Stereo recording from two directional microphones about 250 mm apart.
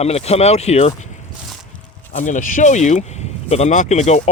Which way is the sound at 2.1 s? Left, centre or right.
Left.